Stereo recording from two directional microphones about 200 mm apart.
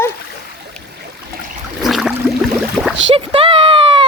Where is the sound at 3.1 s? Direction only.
25° right (ahead or behind).